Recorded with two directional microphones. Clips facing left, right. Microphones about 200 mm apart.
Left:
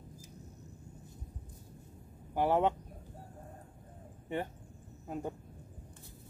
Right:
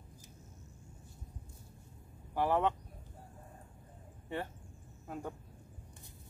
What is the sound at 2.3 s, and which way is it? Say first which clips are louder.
Speech: left 2 dB; 20° left (ahead or behind).